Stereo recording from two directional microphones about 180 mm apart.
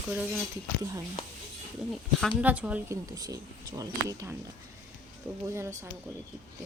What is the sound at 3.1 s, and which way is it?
Speech, 20° right (ahead or behind).